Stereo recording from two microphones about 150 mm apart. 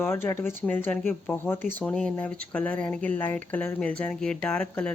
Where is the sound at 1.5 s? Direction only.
60° right (ahead or behind).